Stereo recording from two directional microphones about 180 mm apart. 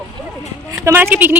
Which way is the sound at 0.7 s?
15° right (ahead or behind).